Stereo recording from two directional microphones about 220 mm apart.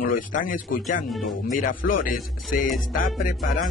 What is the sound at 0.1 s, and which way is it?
Speech, 40° left (ahead or behind).